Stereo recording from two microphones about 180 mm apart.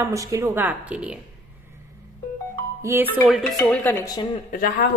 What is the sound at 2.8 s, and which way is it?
Speech, 15° right (ahead or behind).